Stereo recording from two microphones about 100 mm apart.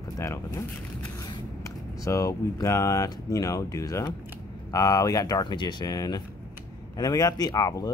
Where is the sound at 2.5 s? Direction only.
35° left (ahead or behind).